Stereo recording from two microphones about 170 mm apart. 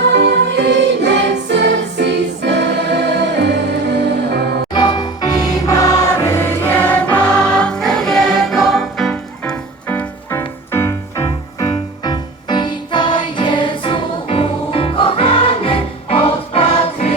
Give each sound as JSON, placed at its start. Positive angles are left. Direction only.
{"t": 0.1, "sound": "music", "side_deg": -90}
{"t": 4.7, "sound": "music", "side_deg": 25}